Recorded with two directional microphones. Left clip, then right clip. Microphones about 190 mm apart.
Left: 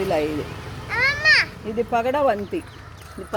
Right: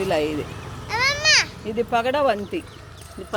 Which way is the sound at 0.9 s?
65° right (ahead or behind).